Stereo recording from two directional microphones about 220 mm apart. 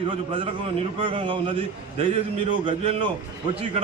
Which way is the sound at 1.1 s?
25° right (ahead or behind).